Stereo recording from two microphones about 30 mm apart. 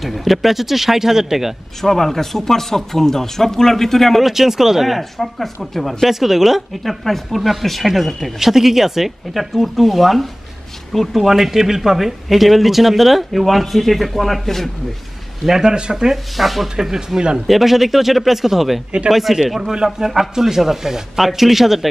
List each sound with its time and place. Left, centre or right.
0.0 s speech: centre
1.8 s speech: centre
4.2 s speech: centre
6.0 s speech: centre
6.8 s speech: centre
8.4 s speech: centre
15.6 s speech: right
16.3 s speech: centre
16.6 s speech: centre
19.7 s speech: right
20.1 s speech: centre